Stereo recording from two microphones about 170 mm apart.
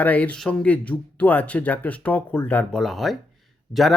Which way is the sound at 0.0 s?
10° left (ahead or behind).